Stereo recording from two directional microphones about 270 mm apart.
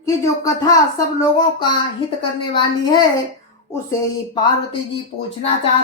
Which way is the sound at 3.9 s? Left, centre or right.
Centre.